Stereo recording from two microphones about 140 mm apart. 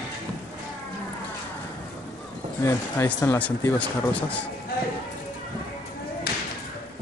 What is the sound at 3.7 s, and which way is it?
Speech, 10° left (ahead or behind).